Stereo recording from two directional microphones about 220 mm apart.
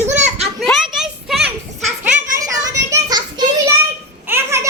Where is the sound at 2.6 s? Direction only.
15° right (ahead or behind).